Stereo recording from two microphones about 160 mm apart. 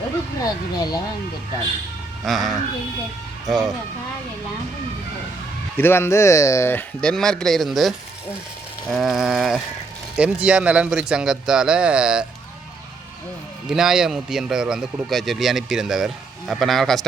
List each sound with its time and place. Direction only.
0.4 s speech: 25° left (ahead or behind)
2.2 s a man's voice: centre (ahead or behind)
5.7 s a man's voice: 15° left (ahead or behind); by 12.2 s 5° right (ahead or behind)
13.7 s a man's voice: 5° right (ahead or behind)